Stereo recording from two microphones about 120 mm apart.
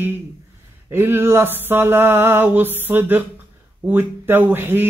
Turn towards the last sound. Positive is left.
turn(degrees=-15)  # may be behind; listen again after turning